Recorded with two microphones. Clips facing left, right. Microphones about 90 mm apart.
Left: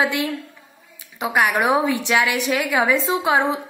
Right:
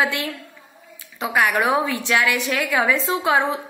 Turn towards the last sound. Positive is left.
turn(degrees=20)  # may be behind; listen again after turning